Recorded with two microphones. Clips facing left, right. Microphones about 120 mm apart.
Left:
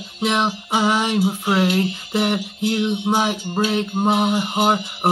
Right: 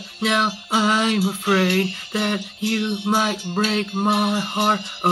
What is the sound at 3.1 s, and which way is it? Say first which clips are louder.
Mantra: left 1 dB; 15° left (ahead or behind).